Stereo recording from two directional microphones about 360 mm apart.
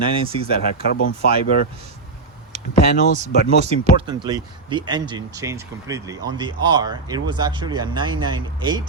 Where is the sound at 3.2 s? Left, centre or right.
Centre.